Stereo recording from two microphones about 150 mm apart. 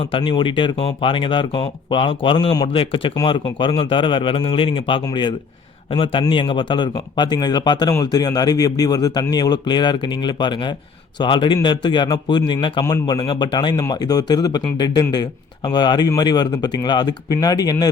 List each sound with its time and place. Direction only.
0.0 s speech: 35° left (ahead or behind)